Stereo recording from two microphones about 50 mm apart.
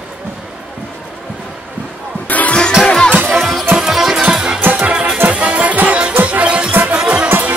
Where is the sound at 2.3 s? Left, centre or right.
Left.